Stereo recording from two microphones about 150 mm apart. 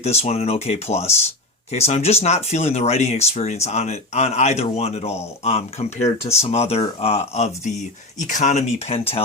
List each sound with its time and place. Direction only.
0.0 s speech: 45° left (ahead or behind)